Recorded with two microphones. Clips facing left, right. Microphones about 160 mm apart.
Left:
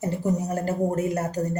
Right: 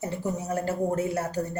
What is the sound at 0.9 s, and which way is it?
Speech, 40° left (ahead or behind).